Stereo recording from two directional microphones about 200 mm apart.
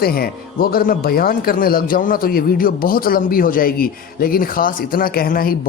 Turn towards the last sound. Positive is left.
turn(degrees=45)  # may be behind; listen again after turning